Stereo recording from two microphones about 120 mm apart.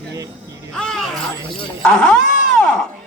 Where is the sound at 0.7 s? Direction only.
5° left (ahead or behind).